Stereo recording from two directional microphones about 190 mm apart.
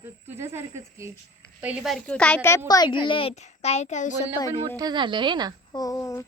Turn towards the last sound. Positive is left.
turn(degrees=15)  # may be behind; listen again after turning